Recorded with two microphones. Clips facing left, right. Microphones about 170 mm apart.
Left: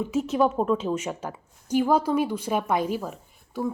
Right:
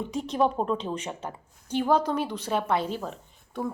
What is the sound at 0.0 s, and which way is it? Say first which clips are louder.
A woman's voice: left 3 dB; 5° left (ahead or behind).